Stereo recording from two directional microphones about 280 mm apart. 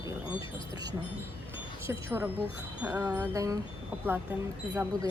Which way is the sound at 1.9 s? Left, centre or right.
Centre.